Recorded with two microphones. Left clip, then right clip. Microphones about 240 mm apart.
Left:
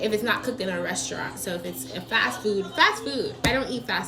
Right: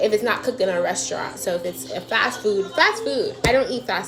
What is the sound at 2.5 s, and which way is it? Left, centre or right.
A child's voice, right.